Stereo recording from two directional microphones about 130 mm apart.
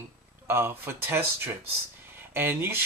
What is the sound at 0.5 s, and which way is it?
Speech, 15° right (ahead or behind).